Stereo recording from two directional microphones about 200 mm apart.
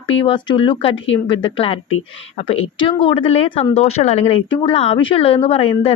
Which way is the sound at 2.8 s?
25° left (ahead or behind).